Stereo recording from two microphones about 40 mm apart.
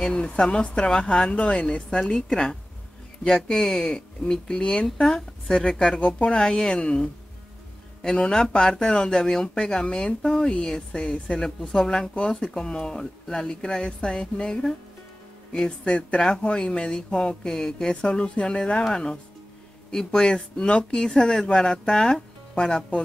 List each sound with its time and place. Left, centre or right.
0.1 s speech: left
1.9 s speech: centre
5.9 s speech: left
6.4 s speech: centre
14.5 s speech: centre
15.8 s speech: left; by 17.9 s centre
18.0 s speech: left